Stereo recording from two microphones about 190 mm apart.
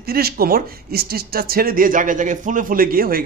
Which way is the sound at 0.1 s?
55° right (ahead or behind).